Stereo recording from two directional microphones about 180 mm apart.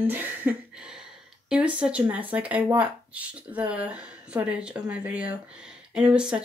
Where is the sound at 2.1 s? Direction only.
10° right (ahead or behind).